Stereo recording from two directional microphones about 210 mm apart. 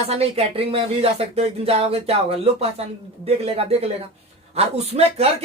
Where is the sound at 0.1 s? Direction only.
30° right (ahead or behind).